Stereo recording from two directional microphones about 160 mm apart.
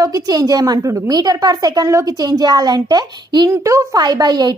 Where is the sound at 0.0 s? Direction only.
20° right (ahead or behind).